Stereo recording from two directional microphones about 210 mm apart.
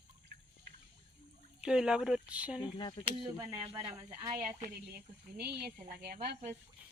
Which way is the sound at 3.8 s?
25° right (ahead or behind).